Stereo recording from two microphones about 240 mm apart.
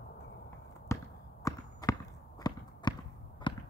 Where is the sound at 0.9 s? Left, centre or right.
Centre.